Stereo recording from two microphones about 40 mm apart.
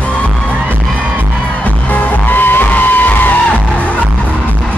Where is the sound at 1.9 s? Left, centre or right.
Left.